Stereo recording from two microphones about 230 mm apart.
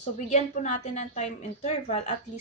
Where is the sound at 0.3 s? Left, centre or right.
Left.